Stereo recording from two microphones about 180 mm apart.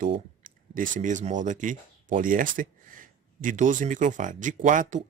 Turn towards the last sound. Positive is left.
turn(degrees=-45)  # may be behind; listen again after turning